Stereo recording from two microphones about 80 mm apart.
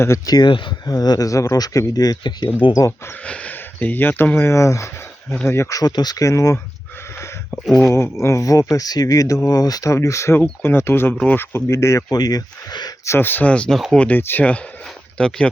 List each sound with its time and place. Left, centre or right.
0.3 s speech: left
0.9 s speech: left
2.7 s speech: left
3.2 s speech: centre
4.4 s speech: left
5.7 s speech: left
7.1 s a sound: left
7.9 s speech: left
9.9 s speech: left
12.1 s speech: left
13.1 s speech: left
14.8 s a sound: centre